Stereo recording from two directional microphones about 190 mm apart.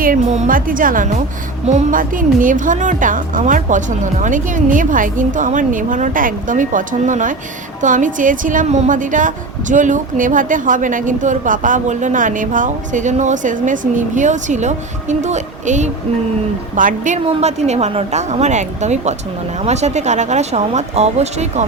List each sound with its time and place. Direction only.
0.0 s a woman's voice: 40° right (ahead or behind)